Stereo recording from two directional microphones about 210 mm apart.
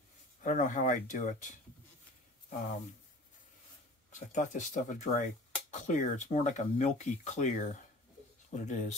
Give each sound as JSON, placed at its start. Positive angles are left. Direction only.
{"t": 0.4, "sound": "speech", "side_deg": 40}
{"t": 4.1, "sound": "speech", "side_deg": 35}